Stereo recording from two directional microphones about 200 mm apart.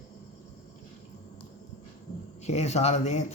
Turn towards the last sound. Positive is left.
turn(degrees=35)  # may be behind; listen again after turning